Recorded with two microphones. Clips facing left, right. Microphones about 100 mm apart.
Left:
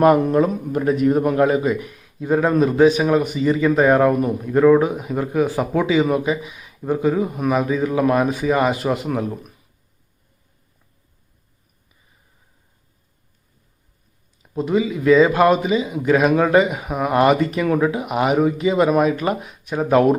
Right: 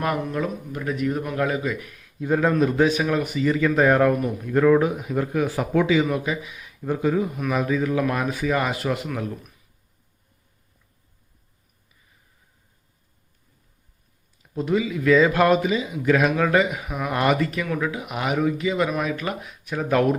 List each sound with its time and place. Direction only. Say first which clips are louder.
0.0 s a man's voice: left 11 dB; 40° left (ahead or behind); by 7.3 s 10° left (ahead or behind)
7.3 s a man's voice: left 4 dB; 25° left (ahead or behind)
14.4 s a man's voice: left 3 dB; 15° left (ahead or behind)
16.8 s speech: left 6 dB; 30° left (ahead or behind)
17.1 s a man's voice: left 6 dB; 20° left (ahead or behind)